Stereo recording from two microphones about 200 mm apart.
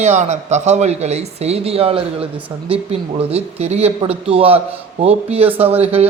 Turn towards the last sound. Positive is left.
turn(degrees=-30)  # may be behind; listen again after turning